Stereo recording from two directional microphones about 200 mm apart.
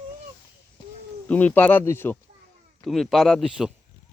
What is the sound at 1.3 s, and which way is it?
Speech, 10° left (ahead or behind).